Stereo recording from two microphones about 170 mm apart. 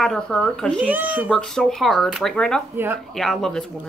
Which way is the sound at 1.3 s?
5° left (ahead or behind).